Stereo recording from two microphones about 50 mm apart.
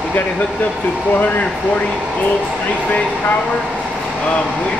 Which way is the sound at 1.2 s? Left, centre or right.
Left.